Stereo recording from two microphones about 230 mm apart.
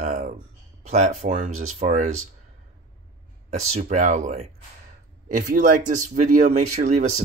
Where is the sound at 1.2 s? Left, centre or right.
Right.